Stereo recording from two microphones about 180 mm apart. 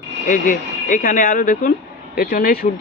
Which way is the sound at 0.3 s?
45° left (ahead or behind).